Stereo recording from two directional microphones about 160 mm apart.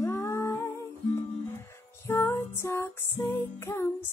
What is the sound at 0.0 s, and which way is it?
Humming, 20° left (ahead or behind).